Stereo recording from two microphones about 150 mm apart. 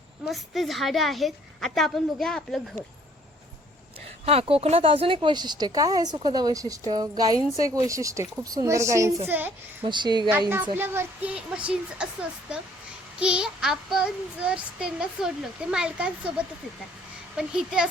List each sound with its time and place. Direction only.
0.3 s a woman's voice: centre (ahead or behind)
4.3 s speech: 40° right (ahead or behind); by 9.5 s 15° right (ahead or behind)
9.8 s a woman's voice: 30° right (ahead or behind)
10.8 s a woman's voice: 15° right (ahead or behind)
17.3 s a woman's voice: 5° right (ahead or behind)